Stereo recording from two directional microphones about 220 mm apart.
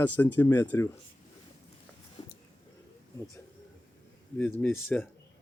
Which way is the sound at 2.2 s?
20° left (ahead or behind).